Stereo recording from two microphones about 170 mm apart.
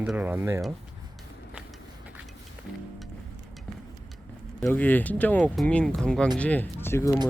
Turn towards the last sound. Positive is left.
turn(degrees=15)  # may be behind; listen again after turning